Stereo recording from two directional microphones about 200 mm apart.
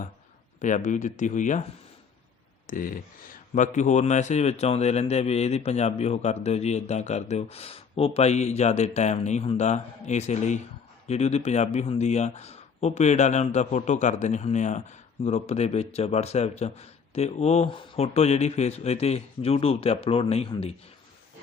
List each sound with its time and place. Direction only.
0.6 s speech: 40° left (ahead or behind)
2.6 s speech: 45° left (ahead or behind)